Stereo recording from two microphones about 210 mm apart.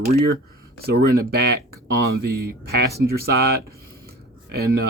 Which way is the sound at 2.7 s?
50° right (ahead or behind).